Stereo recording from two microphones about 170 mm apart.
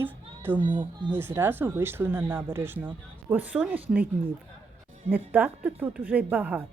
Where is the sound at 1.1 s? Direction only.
15° right (ahead or behind).